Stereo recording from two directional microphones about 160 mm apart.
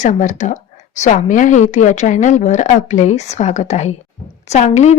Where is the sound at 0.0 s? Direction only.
50° left (ahead or behind).